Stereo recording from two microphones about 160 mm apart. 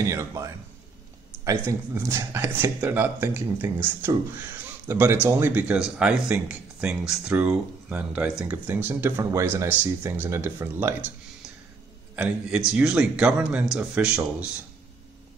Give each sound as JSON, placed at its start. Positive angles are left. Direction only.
{"t": 0.1, "sound": "a man's voice", "side_deg": -20}
{"t": 12.2, "sound": "a man's voice", "side_deg": -5}